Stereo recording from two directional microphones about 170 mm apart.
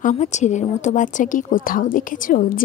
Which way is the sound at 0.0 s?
45° left (ahead or behind).